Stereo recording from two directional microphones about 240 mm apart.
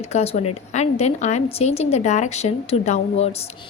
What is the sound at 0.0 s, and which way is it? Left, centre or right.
A woman's voice, left.